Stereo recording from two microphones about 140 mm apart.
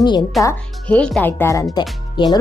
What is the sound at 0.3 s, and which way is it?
A woman's voice, centre (ahead or behind).